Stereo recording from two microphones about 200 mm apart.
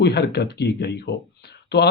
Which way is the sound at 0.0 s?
55° left (ahead or behind).